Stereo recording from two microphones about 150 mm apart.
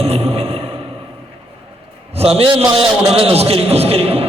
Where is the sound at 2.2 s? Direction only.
40° right (ahead or behind).